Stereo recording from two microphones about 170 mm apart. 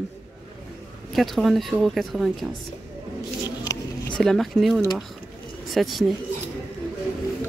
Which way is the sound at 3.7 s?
20° left (ahead or behind).